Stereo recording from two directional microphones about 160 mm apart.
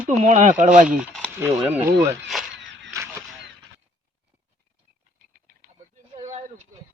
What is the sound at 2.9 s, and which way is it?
Honk, 20° right (ahead or behind).